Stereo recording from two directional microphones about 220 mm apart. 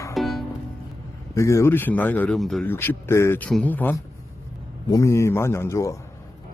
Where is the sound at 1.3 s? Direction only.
15° left (ahead or behind).